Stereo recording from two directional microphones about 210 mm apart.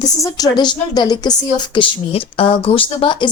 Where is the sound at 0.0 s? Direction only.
20° left (ahead or behind).